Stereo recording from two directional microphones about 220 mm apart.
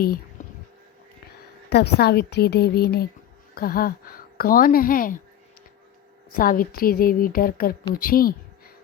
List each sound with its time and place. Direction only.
0.4 s a sound: 35° left (ahead or behind)
1.7 s a woman's voice: 45° left (ahead or behind)
6.3 s speech: 40° left (ahead or behind)